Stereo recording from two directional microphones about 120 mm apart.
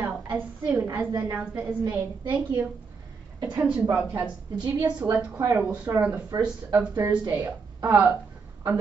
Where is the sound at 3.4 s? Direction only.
10° right (ahead or behind).